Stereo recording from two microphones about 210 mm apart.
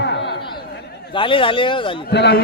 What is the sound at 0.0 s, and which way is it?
Chatter, 55° left (ahead or behind).